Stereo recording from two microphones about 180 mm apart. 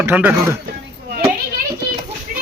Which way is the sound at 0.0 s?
10° right (ahead or behind).